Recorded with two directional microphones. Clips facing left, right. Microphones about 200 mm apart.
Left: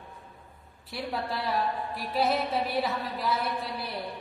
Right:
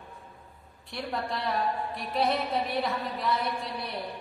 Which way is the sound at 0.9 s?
5° left (ahead or behind).